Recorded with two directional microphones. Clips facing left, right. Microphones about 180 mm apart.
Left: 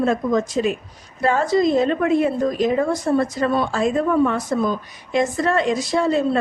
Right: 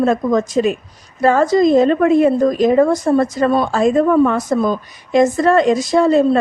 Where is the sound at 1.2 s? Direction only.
40° right (ahead or behind).